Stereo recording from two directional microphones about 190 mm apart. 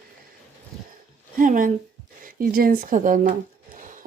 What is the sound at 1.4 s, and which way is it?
Speech, 45° right (ahead or behind).